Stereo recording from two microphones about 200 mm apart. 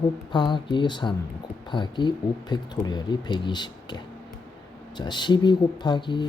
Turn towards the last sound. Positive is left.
turn(degrees=25)  # may be behind; listen again after turning